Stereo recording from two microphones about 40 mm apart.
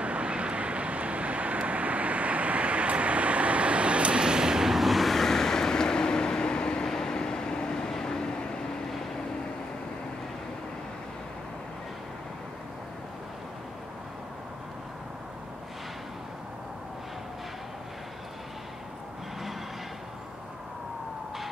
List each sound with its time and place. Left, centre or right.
0.0 s vehicle: right; by 4.7 s centre
4.7 s vehicle: centre